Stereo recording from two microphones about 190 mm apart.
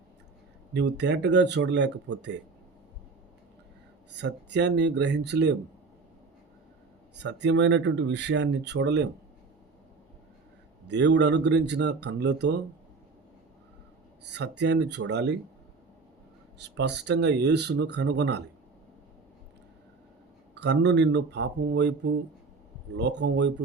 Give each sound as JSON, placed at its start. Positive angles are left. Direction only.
{"t": 0.7, "sound": "speech", "side_deg": -65}
{"t": 4.1, "sound": "speech", "side_deg": -65}
{"t": 7.2, "sound": "speech", "side_deg": -65}
{"t": 10.8, "sound": "speech", "side_deg": -65}
{"t": 14.3, "sound": "speech", "side_deg": -65}
{"t": 16.6, "sound": "speech", "side_deg": -65}
{"t": 20.6, "sound": "speech", "side_deg": -65}